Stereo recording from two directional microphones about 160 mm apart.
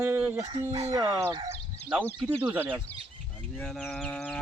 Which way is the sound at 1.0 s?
20° right (ahead or behind).